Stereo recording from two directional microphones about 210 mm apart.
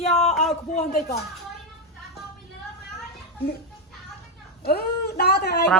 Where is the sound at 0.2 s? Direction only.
30° left (ahead or behind).